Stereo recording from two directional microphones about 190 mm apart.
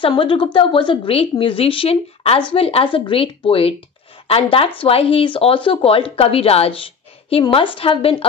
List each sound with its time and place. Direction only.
0.0 s speech: 25° left (ahead or behind)